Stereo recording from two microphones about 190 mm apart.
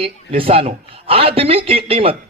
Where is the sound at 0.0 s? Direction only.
30° right (ahead or behind).